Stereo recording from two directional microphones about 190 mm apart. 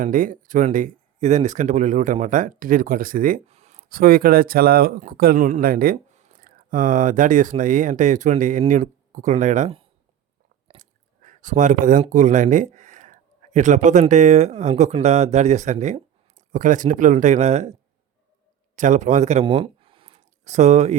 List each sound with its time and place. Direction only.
0.0 s speech: 45° right (ahead or behind)
3.4 s speech: 35° right (ahead or behind)
18.8 s speech: 40° right (ahead or behind)